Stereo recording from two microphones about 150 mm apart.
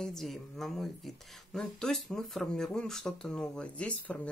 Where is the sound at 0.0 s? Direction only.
Centre (ahead or behind).